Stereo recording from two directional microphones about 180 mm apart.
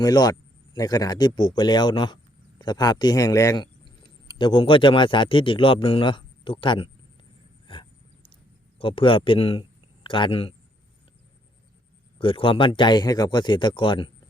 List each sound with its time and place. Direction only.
0.0 s speech: 20° left (ahead or behind)
7.7 s a sound: 30° left (ahead or behind)
8.8 s speech: 30° left (ahead or behind)
12.2 s speech: 30° left (ahead or behind)